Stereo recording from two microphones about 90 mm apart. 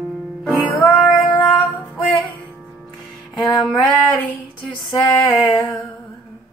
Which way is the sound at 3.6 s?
10° left (ahead or behind).